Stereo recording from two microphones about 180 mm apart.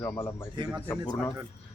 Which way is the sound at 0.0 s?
15° left (ahead or behind).